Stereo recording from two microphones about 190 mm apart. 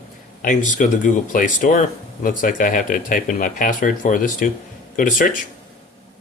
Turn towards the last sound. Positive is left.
turn(degrees=45)  # may be behind; listen again after turning